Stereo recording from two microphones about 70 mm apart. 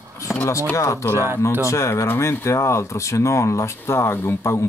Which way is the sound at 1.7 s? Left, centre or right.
Left.